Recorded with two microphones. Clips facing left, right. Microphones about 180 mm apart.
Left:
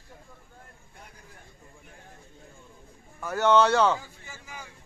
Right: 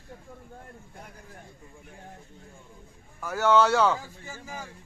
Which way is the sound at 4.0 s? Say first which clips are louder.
Right 3 dB; 40° right (ahead or behind).